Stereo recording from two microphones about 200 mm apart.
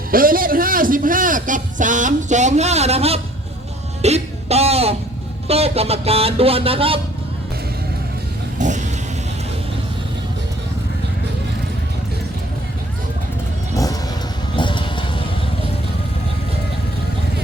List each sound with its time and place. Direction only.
0.1 s a man's voice: 45° right (ahead or behind)
4.0 s music: 30° right (ahead or behind)
5.5 s a sound: 30° right (ahead or behind)
8.5 s vehicle: 40° right (ahead or behind)
13.7 s music: 15° left (ahead or behind)
14.5 s vehicle: 25° left (ahead or behind)